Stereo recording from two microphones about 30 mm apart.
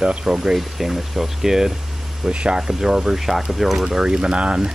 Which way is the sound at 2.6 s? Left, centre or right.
Centre.